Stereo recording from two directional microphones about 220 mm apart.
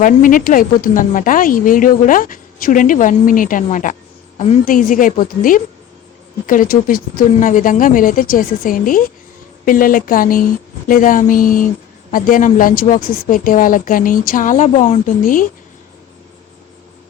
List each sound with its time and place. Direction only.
0.0 s a woman's voice: 40° left (ahead or behind)